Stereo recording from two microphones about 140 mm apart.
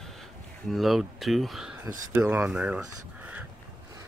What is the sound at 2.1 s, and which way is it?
Speech, 15° right (ahead or behind).